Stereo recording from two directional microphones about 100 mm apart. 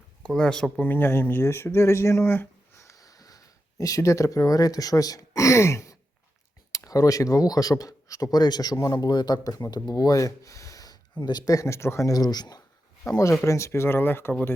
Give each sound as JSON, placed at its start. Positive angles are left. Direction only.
{"t": 0.3, "sound": "speech", "side_deg": 5}
{"t": 11.2, "sound": "speech", "side_deg": 45}
{"t": 13.1, "sound": "speech", "side_deg": 30}